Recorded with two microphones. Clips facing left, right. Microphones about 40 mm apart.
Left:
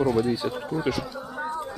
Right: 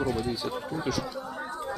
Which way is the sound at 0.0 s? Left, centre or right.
Centre.